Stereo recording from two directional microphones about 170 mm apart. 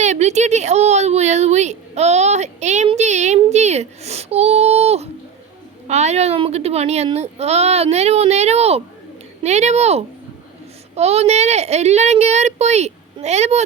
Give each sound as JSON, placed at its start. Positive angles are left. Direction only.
{"t": 0.0, "sound": "a child's voice", "side_deg": -40}